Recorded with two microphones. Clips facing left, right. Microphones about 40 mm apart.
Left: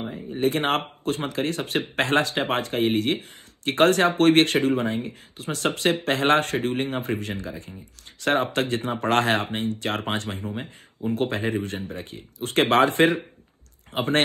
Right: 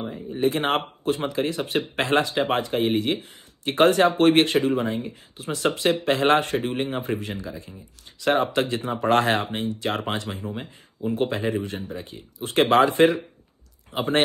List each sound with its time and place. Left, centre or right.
0.0 s speech: centre
0.4 s speech: left
7.0 s speech: left